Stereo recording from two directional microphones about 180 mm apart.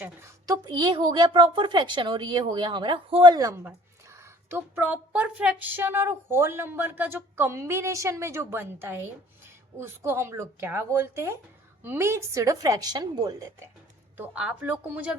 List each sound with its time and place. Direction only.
0.0 s a woman's voice: 15° right (ahead or behind)
14.2 s a woman's voice: 10° right (ahead or behind)